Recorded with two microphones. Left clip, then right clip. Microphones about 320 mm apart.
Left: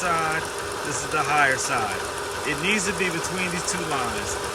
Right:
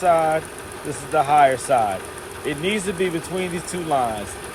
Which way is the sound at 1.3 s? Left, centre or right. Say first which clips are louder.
Right 5 dB; centre.